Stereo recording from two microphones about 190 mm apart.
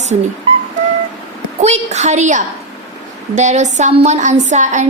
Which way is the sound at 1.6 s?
35° right (ahead or behind).